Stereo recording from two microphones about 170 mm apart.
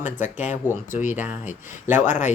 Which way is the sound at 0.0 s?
45° left (ahead or behind).